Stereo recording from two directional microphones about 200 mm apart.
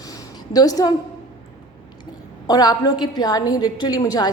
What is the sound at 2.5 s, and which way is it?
A woman's voice, 20° left (ahead or behind).